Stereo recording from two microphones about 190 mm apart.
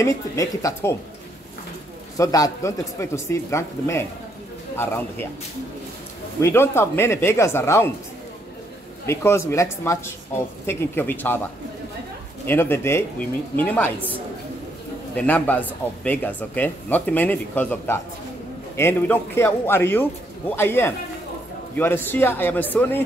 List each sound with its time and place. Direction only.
0.0 s speech: 15° left (ahead or behind)
2.1 s speech: 20° left (ahead or behind)
6.4 s speech: 15° left (ahead or behind)
9.0 s speech: 15° left (ahead or behind)
12.4 s speech: 10° left (ahead or behind)
15.1 s speech: 10° left (ahead or behind)